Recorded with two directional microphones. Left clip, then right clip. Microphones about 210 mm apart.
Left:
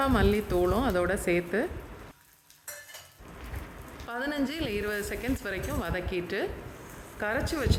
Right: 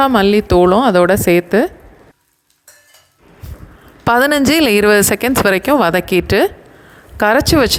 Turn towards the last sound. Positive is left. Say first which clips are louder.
# right 19 dB
turn(degrees=-45)  # may be behind; listen again after turning